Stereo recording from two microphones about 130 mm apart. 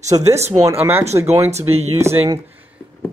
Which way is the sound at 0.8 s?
15° right (ahead or behind).